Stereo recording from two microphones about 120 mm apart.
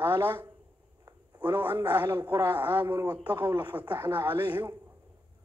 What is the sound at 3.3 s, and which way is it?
Speech, 35° right (ahead or behind).